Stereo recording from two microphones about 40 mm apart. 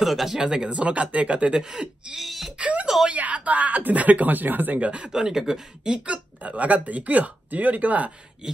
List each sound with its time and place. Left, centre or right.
0.0 s speech: centre
0.4 s speech: centre
0.7 s speech: right
1.5 s speech: centre
2.1 s speech: centre
2.6 s wail: right
3.1 s speech: right
4.7 s speech: right
5.1 s speech: centre
5.9 s speech: right